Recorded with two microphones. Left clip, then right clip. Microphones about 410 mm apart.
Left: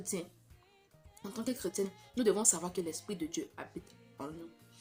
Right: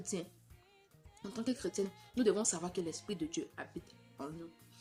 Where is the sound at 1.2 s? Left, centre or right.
Right.